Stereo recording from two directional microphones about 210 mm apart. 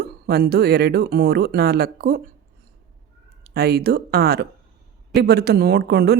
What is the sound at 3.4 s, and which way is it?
Speech, 50° right (ahead or behind).